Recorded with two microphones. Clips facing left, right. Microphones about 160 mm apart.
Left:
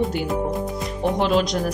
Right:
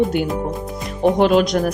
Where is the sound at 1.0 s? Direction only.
60° right (ahead or behind).